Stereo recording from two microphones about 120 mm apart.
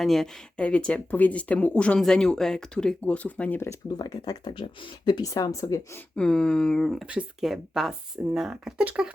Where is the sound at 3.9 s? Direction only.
30° left (ahead or behind).